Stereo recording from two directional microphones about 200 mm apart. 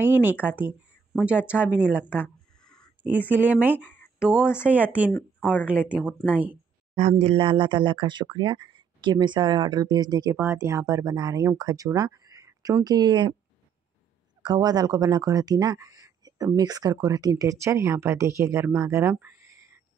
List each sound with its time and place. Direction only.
0.0 s speech: 10° right (ahead or behind)
2.2 s a sound: 5° left (ahead or behind)
3.0 s speech: 10° right (ahead or behind)
5.1 s speech: 5° left (ahead or behind)
5.7 s speech: 5° right (ahead or behind)
7.0 s speech: 35° right (ahead or behind)
14.4 s speech: 20° right (ahead or behind)